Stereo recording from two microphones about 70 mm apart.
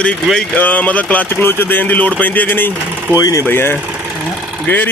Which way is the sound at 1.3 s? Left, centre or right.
Left.